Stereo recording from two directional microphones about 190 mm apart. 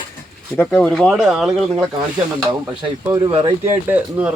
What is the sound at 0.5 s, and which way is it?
Speech, 10° left (ahead or behind).